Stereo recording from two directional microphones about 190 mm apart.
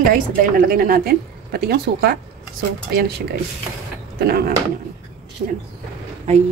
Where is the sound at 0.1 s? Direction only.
50° right (ahead or behind).